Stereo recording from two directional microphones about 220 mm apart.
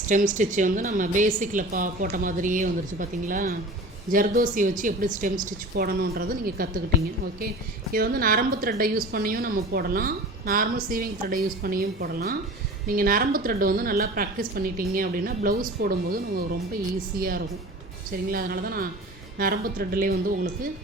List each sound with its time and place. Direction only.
0.1 s a woman's voice: 35° right (ahead or behind)
7.9 s a woman's voice: 40° right (ahead or behind)